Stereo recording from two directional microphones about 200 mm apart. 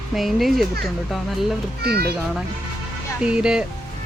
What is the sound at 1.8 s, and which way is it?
Speech, 50° right (ahead or behind).